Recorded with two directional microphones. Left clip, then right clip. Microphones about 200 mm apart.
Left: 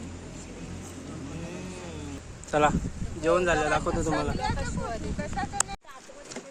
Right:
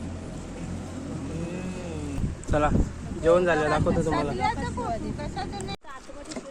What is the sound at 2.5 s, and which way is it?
Speech, 15° left (ahead or behind).